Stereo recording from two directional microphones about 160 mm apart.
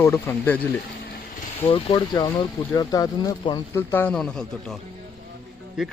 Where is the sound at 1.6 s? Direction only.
30° left (ahead or behind).